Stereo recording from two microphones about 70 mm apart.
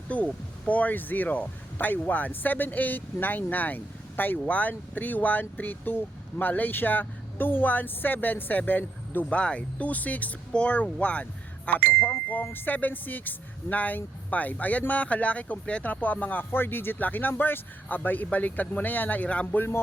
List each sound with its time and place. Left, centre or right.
0.1 s speech: left